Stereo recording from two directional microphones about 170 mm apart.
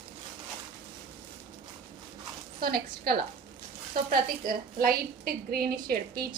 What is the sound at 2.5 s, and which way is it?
A woman's voice, 60° right (ahead or behind).